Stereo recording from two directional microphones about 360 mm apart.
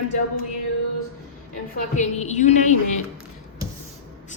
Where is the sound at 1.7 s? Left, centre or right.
Centre.